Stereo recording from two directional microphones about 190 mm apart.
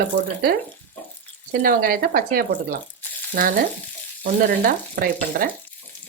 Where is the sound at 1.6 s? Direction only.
50° right (ahead or behind).